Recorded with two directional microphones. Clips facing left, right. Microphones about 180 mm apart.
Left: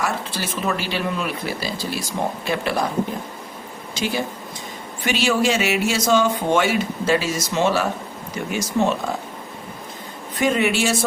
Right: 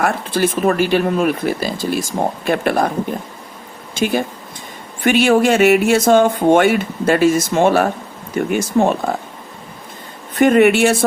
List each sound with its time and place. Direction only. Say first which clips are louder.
0.0 s speech: right 8 dB; 50° right (ahead or behind)
3.9 s speech: right 6 dB; 50° right (ahead or behind)
10.4 s speech: right 8 dB; 60° right (ahead or behind)